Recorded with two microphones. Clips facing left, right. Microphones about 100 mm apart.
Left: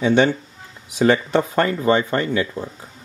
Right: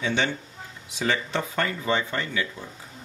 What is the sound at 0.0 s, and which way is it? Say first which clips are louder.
Speech: left 10 dB; 50° left (ahead or behind).